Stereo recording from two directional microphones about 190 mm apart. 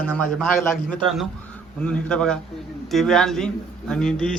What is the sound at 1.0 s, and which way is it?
A man's voice, centre (ahead or behind).